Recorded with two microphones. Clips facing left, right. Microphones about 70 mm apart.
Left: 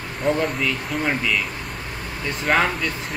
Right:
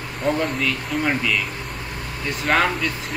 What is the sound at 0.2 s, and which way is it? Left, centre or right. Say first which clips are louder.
Speech: even; centre.